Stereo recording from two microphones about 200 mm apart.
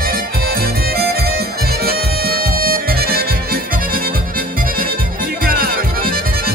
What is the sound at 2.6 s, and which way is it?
Harmonica, 50° right (ahead or behind).